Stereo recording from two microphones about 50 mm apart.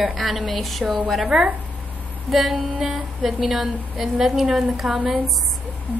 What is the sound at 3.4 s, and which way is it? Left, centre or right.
A woman's voice, centre.